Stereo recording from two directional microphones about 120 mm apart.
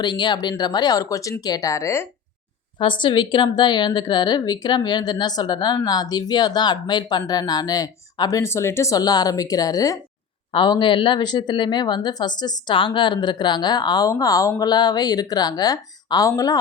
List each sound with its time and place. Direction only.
0.0 s speech: 40° left (ahead or behind); by 2.0 s 25° left (ahead or behind)
2.7 s speech: 40° left (ahead or behind)
10.5 s speech: 40° left (ahead or behind)